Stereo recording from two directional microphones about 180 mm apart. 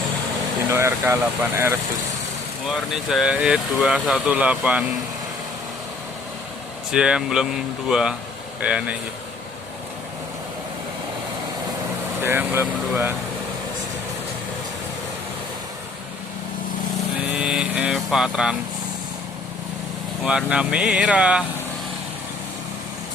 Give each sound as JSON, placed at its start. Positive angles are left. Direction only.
{"t": 0.7, "sound": "speech", "side_deg": -15}
{"t": 2.6, "sound": "speech", "side_deg": 0}
{"t": 6.9, "sound": "speech", "side_deg": -5}
{"t": 12.2, "sound": "speech", "side_deg": -10}
{"t": 17.2, "sound": "cattle", "side_deg": -5}
{"t": 20.2, "sound": "speech", "side_deg": -5}